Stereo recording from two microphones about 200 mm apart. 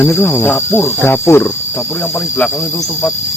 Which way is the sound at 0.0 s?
10° left (ahead or behind).